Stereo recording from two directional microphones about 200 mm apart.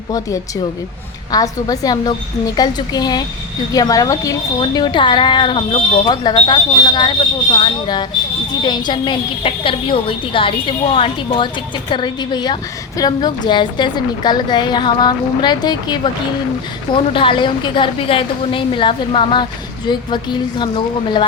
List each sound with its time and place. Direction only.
1.3 s a woman's voice: 20° left (ahead or behind)